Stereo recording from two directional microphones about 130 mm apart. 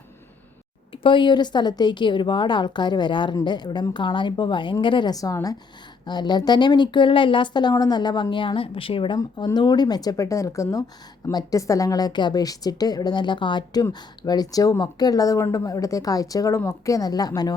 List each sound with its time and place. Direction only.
1.0 s speech: 40° left (ahead or behind)